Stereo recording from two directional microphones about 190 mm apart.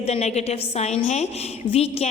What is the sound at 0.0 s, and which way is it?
A woman's voice, 35° left (ahead or behind).